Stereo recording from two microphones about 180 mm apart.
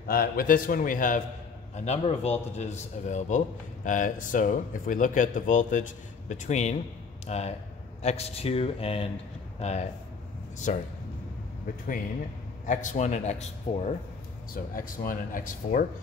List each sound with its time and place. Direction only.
0.0 s a man's voice: 55° left (ahead or behind)
12.6 s a man's voice: 40° left (ahead or behind)
14.5 s a man's voice: 50° left (ahead or behind)